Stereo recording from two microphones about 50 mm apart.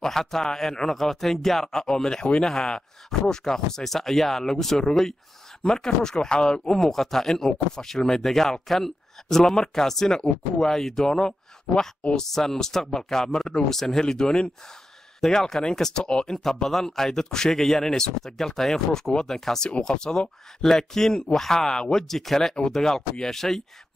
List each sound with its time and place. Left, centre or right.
0.0 s speech: centre
12.2 s speech: centre
16.6 s speech: centre